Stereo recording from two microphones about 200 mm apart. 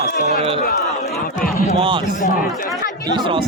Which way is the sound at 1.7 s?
25° right (ahead or behind).